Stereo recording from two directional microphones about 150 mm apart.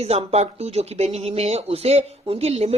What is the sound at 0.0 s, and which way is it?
A woman's voice, 40° right (ahead or behind).